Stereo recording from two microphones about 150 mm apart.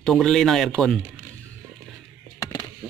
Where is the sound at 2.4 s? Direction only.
20° left (ahead or behind).